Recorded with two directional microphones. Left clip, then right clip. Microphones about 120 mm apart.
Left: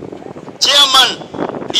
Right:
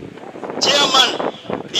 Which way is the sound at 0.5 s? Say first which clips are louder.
Left 5 dB; 35° left (ahead or behind).